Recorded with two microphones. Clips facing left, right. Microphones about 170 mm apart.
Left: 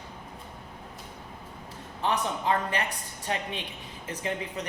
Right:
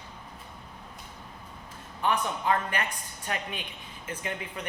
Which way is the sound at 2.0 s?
30° left (ahead or behind).